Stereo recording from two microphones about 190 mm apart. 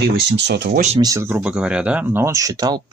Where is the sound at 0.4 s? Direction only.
65° right (ahead or behind).